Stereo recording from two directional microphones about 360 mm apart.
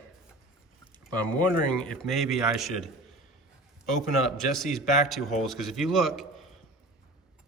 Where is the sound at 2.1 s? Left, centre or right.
Centre.